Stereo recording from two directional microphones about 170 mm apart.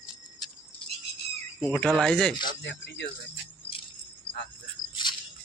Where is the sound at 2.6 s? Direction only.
90° left.